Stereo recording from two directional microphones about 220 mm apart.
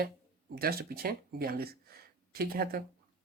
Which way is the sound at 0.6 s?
45° right (ahead or behind).